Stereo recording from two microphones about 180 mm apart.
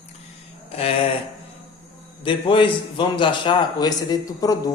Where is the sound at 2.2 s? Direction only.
30° left (ahead or behind).